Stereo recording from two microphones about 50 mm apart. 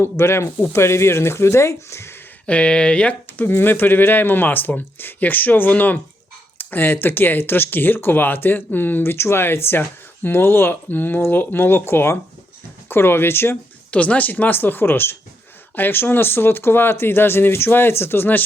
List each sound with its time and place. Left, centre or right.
0.0 s speech: left
2.5 s speech: left
3.4 s speech: left
9.1 s speech: left
13.9 s speech: left